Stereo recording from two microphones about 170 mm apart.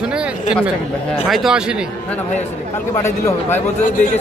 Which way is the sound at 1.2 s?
Centre (ahead or behind).